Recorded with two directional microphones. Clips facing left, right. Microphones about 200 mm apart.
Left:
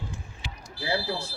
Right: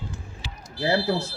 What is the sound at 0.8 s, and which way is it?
Smoke detector, 70° right (ahead or behind).